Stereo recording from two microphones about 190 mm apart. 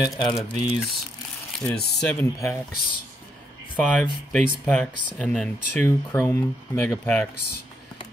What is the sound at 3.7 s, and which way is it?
Speech, 5° left (ahead or behind).